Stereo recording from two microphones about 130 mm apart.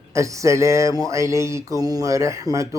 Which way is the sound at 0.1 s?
25° right (ahead or behind).